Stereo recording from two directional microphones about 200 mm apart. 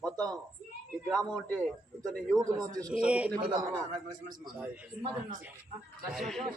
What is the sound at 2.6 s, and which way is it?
Speech, 15° right (ahead or behind).